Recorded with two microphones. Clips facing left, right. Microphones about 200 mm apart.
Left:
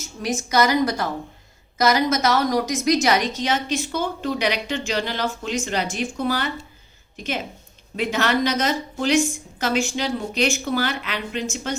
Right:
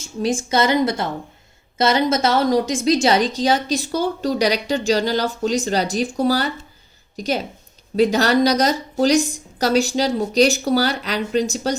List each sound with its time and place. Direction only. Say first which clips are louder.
0.0 s a woman's voice: right 5 dB; 30° right (ahead or behind)